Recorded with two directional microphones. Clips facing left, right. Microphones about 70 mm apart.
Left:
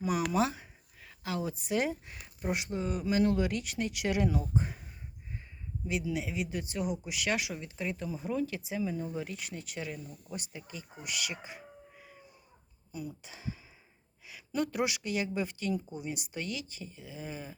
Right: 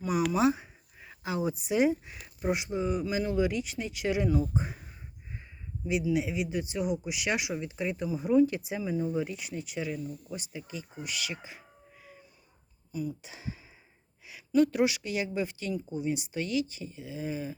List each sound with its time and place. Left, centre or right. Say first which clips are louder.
0.0 s speech: right 1 dB; centre
0.4 s speech: right 8 dB; centre
5.9 s speech: right 5 dB; centre
8.4 s speech: right 3 dB; right
8.8 s speech: right 5 dB; centre
12.9 s a sound: right 6 dB; centre
13.2 s speech: right 1 dB; centre
14.3 s speech: right 9 dB; centre